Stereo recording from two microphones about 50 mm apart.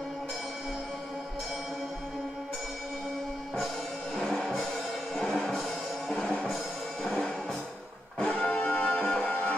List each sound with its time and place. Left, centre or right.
3.5 s music: centre
6.1 s music: left
7.0 s music: centre
8.9 s music: centre
9.2 s music: left